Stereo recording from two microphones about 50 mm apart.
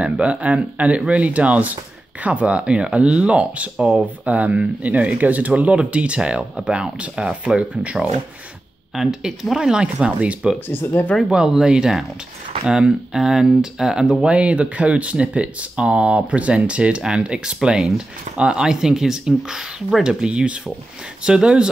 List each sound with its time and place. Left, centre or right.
0.0 s speech: right
8.9 s speech: centre
10.7 s speech: left
11.2 s speech: centre
14.2 s speech: right